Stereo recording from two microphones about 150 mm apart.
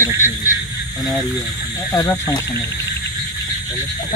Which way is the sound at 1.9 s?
20° left (ahead or behind).